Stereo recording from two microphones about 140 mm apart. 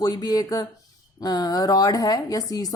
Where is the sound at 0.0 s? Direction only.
30° left (ahead or behind).